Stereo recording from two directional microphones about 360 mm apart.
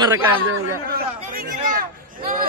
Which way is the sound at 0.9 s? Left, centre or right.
Right.